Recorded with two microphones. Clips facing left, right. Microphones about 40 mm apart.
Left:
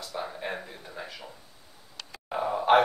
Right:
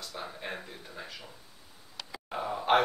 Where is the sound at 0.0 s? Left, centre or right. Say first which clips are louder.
Left 5 dB; centre.